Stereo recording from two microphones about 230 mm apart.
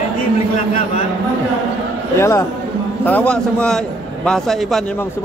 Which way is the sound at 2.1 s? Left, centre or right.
Centre.